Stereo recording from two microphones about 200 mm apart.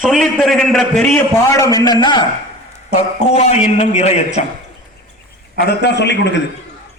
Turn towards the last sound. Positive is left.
turn(degrees=60)  # may be behind; listen again after turning